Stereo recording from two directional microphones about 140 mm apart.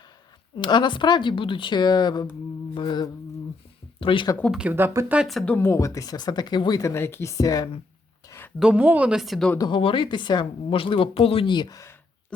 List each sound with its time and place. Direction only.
0.5 s speech: 35° left (ahead or behind)
4.5 s speech: 10° right (ahead or behind)
5.2 s speech: centre (ahead or behind)
5.5 s speech: 20° left (ahead or behind)
8.5 s speech: 5° right (ahead or behind)
9.6 s speech: 35° left (ahead or behind)